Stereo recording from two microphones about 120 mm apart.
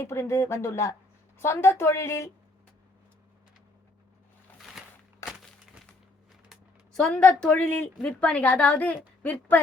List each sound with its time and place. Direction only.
0.0 s speech: 25° left (ahead or behind)
4.8 s a sound: 5° right (ahead or behind)
6.5 s a woman's voice: 5° left (ahead or behind)